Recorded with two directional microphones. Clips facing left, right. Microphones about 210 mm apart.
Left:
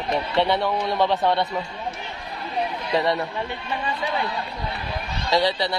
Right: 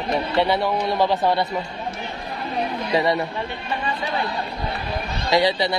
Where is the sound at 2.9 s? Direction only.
10° right (ahead or behind).